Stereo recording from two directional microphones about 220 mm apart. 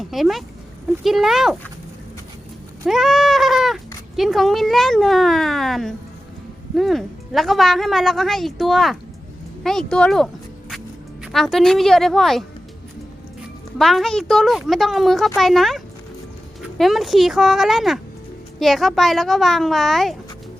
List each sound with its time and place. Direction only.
0.0 s a woman's voice: centre (ahead or behind)
2.8 s goat: centre (ahead or behind)
4.2 s a woman's voice: centre (ahead or behind)
13.7 s a woman's voice: centre (ahead or behind)